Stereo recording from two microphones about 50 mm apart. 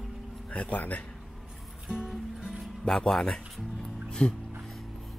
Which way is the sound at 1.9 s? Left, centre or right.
Centre.